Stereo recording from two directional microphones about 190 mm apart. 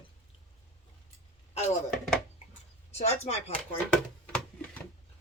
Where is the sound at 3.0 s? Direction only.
35° left (ahead or behind).